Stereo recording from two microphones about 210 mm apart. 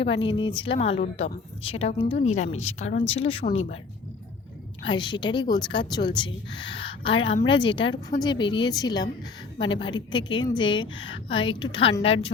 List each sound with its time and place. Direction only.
0.2 s speech: 25° left (ahead or behind)
4.9 s a woman's voice: 20° left (ahead or behind)